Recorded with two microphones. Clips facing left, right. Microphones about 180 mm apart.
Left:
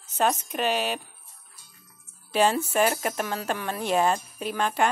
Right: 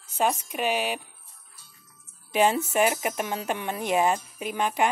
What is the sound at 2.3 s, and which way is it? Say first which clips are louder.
A woman's voice: even; 15° right (ahead or behind).